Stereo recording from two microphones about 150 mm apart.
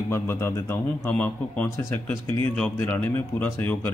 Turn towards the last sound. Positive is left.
turn(degrees=10)  # may be behind; listen again after turning